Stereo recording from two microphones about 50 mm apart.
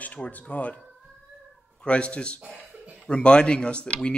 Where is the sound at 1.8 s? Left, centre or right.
Left.